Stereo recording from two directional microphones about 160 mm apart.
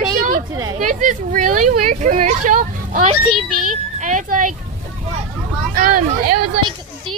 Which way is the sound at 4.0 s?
55° right (ahead or behind).